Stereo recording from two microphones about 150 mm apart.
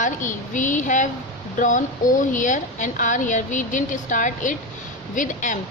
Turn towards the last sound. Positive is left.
turn(degrees=60)  # may be behind; listen again after turning